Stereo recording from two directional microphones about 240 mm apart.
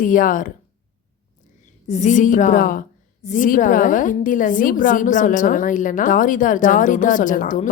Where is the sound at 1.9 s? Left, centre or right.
Left.